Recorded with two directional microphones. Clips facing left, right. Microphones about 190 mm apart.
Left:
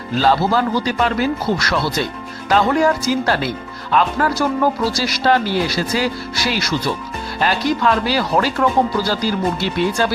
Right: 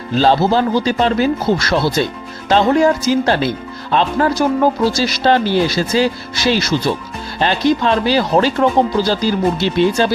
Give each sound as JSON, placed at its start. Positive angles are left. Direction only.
{"t": 0.2, "sound": "speech", "side_deg": -30}